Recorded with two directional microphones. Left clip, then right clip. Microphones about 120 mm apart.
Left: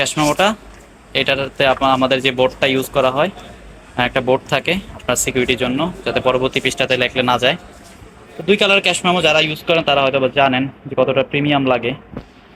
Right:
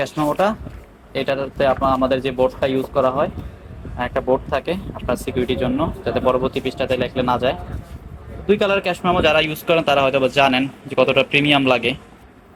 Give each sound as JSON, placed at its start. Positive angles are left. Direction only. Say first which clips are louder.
{"t": 0.4, "sound": "speech", "louder": "left 3 dB", "side_deg": -15}